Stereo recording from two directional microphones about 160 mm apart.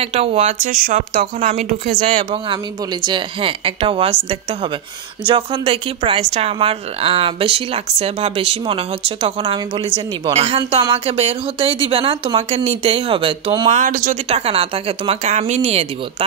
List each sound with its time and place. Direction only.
0.0 s speech: 40° right (ahead or behind)
5.2 s speech: 35° right (ahead or behind)
13.7 s speech: 50° right (ahead or behind)